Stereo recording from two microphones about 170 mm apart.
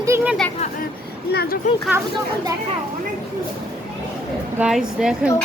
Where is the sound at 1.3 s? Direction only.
70° left (ahead or behind).